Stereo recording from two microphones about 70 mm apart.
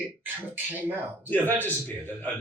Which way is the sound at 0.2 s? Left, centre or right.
Right.